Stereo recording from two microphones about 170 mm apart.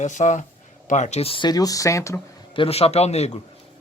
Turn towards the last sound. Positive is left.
turn(degrees=40)  # may be behind; listen again after turning